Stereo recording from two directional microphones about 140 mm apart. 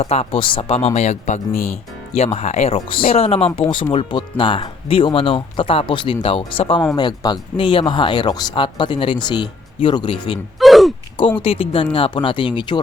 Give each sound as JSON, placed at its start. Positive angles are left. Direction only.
{"t": 0.0, "sound": "speech", "side_deg": 45}
{"t": 6.9, "sound": "speech", "side_deg": 30}
{"t": 10.6, "sound": "a sound", "side_deg": 0}
{"t": 11.3, "sound": "speech", "side_deg": 40}